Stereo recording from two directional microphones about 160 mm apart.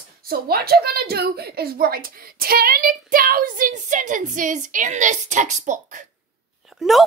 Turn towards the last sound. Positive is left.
turn(degrees=0)  # may be behind; listen again after turning